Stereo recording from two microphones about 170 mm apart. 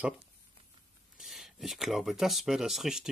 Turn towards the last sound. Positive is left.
turn(degrees=0)  # may be behind; listen again after turning